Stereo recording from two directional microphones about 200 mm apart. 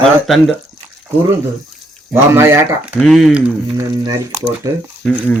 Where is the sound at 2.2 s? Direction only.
15° right (ahead or behind).